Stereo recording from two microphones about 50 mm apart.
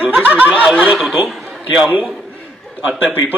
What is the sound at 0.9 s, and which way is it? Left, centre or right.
Speech, centre.